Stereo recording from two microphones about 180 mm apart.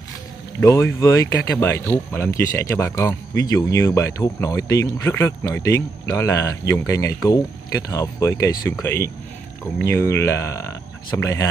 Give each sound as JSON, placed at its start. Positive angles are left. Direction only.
{"t": 0.6, "sound": "speech", "side_deg": 15}